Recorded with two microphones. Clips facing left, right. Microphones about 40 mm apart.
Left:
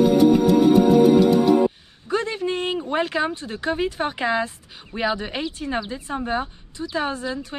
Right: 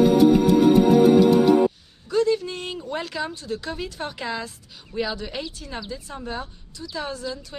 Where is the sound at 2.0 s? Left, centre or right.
Left.